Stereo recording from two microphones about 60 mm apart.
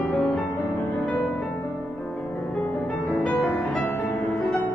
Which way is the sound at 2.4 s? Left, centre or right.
Centre.